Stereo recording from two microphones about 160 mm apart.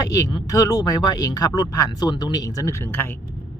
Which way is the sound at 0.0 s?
20° left (ahead or behind).